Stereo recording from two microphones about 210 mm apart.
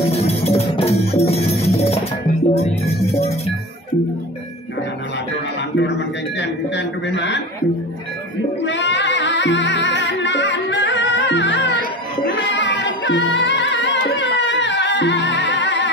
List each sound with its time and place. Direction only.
0.1 s music: 30° left (ahead or behind)
5.8 s a sound: 55° left (ahead or behind)
8.6 s music: 60° left (ahead or behind)